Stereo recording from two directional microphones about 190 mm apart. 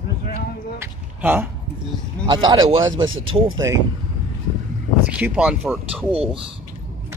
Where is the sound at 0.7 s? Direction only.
10° right (ahead or behind).